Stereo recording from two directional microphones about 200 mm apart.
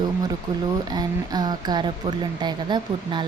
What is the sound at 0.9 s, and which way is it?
Speech, 20° right (ahead or behind).